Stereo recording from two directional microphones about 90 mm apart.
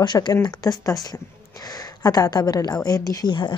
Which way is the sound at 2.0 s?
45° left (ahead or behind).